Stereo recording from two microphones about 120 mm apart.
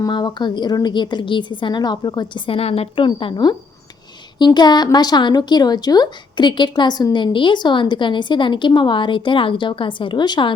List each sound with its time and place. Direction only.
0.0 s a woman's voice: 35° left (ahead or behind)
2.5 s a woman's voice: 55° left (ahead or behind); by 10.5 s 40° left (ahead or behind)